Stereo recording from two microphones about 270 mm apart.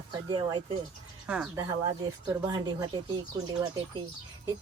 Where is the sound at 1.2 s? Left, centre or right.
Centre.